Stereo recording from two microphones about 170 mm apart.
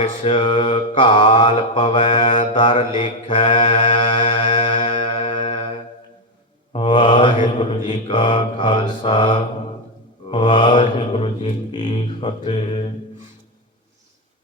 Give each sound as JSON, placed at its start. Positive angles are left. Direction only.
{"t": 0.0, "sound": "mantra", "side_deg": 30}
{"t": 3.8, "sound": "music", "side_deg": 30}
{"t": 6.7, "sound": "mantra", "side_deg": 25}